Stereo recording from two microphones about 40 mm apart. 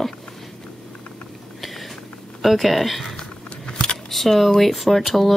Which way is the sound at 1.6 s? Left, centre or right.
Centre.